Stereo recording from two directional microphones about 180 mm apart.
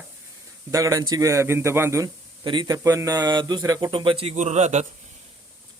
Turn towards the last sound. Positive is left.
turn(degrees=-40)  # may be behind; listen again after turning